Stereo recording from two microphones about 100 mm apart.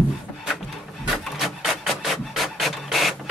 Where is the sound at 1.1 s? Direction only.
Centre (ahead or behind).